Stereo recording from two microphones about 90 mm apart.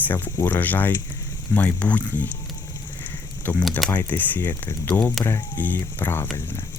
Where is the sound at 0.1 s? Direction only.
20° left (ahead or behind).